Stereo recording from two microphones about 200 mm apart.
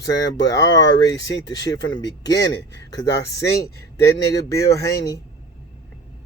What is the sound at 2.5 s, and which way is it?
Speech, 60° left (ahead or behind).